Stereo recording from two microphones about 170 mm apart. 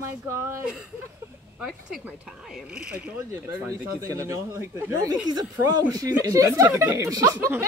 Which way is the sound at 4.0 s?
20° right (ahead or behind).